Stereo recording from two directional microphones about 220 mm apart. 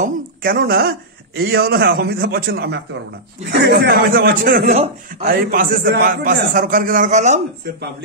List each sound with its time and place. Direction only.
0.0 s a man's voice: 40° right (ahead or behind)